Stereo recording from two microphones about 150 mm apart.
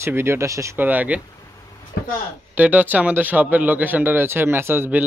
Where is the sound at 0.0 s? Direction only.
15° right (ahead or behind).